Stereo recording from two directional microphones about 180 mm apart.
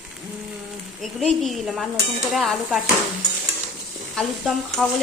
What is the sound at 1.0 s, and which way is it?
Speech, centre (ahead or behind).